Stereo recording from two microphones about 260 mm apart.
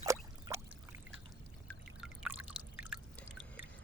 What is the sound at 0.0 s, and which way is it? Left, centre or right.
Pour, centre.